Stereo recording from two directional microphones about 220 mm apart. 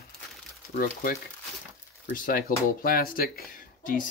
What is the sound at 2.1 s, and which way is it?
Speech, 40° left (ahead or behind).